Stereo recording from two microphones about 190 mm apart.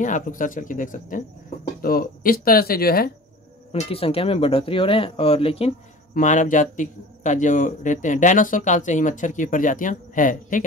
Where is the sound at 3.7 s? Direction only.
30° left (ahead or behind).